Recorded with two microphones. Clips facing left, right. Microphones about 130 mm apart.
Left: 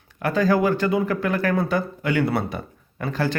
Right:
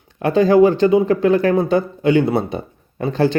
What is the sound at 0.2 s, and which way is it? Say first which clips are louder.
Speech: right 8 dB; 25° right (ahead or behind).